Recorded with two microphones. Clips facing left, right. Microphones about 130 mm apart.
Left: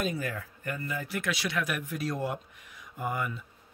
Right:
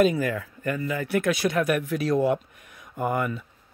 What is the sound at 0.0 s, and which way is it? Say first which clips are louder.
Speech: right 11 dB; 90° right.